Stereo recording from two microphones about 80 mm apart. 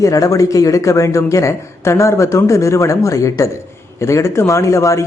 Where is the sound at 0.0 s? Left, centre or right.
Left.